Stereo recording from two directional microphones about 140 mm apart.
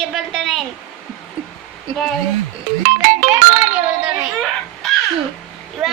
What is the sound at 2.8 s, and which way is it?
Music, 60° right (ahead or behind).